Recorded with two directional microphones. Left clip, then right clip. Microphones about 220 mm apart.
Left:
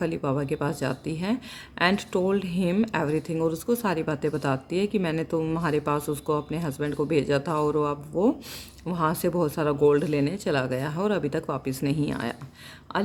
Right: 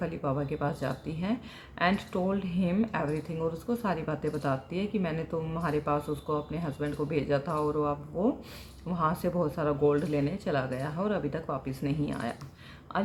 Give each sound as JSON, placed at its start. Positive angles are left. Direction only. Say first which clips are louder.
{"t": 0.0, "sound": "speech", "louder": "left 5 dB", "side_deg": 50}